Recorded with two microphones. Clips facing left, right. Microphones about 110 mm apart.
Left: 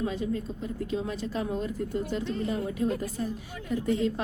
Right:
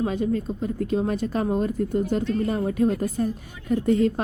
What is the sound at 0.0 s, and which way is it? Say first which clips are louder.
A woman's voice: right 6 dB; 55° right (ahead or behind).